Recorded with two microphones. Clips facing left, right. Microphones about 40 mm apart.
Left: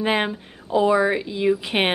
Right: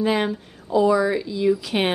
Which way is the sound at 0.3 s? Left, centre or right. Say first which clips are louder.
Right 1 dB; left.